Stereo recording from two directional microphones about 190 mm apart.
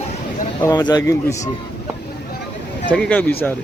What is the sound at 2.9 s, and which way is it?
Speech, 5° left (ahead or behind).